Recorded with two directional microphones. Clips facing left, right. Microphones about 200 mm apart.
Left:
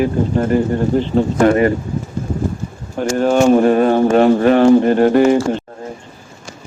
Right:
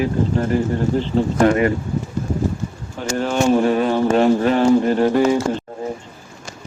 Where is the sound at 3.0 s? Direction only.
50° left (ahead or behind).